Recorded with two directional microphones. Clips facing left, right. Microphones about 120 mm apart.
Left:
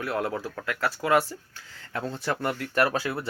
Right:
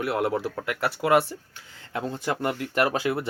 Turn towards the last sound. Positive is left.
turn(degrees=-20)  # may be behind; listen again after turning